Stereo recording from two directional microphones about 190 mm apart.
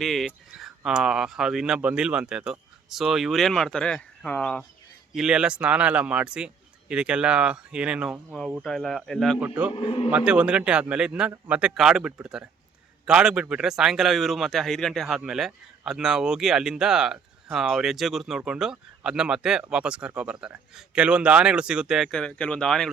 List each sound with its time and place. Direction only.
0.0 s speech: centre (ahead or behind)
9.7 s a man's voice: 30° left (ahead or behind)
10.1 s speech: 5° right (ahead or behind)